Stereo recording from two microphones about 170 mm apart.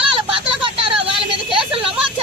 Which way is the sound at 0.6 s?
30° right (ahead or behind).